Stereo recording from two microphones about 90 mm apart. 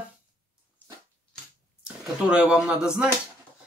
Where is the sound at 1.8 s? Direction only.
10° right (ahead or behind).